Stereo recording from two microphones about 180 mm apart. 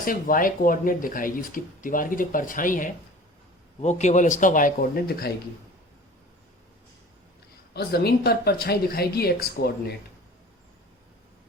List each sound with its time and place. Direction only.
0.0 s speech: 50° left (ahead or behind)
7.7 s speech: 60° left (ahead or behind)